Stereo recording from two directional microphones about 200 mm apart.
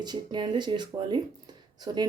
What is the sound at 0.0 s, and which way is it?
Speech, 20° right (ahead or behind).